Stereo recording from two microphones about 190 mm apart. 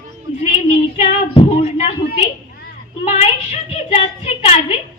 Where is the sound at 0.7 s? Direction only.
30° left (ahead or behind).